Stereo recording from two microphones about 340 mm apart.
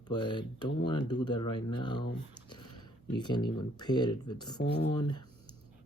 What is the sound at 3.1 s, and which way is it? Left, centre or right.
Speech, centre.